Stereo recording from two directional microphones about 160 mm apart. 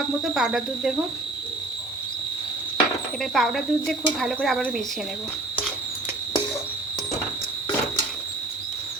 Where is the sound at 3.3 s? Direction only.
Centre (ahead or behind).